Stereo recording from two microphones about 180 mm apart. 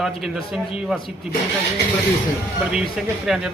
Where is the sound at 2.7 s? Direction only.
5° right (ahead or behind).